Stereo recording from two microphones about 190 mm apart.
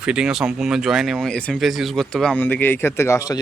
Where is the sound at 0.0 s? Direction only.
5° right (ahead or behind).